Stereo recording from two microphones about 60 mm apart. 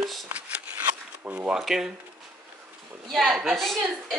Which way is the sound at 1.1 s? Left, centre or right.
Right.